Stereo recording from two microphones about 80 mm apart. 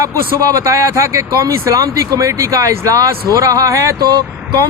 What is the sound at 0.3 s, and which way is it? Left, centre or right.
Speech, right.